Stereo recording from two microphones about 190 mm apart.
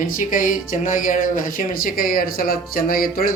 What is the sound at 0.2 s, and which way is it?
Speech, 45° left (ahead or behind).